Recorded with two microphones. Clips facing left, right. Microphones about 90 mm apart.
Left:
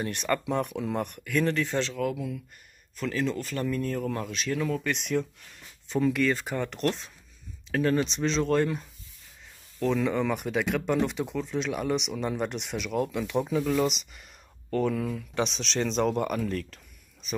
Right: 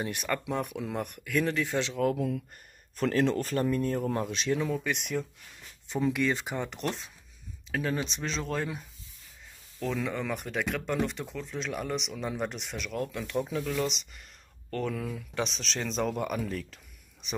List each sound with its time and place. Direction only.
0.0 s speech: 10° right (ahead or behind)
2.1 s speech: 45° right (ahead or behind)
3.5 s speech: 25° right (ahead or behind); by 16.8 s 5° right (ahead or behind)